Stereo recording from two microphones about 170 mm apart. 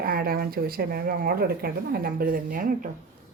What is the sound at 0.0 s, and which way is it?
Speech, 60° right (ahead or behind).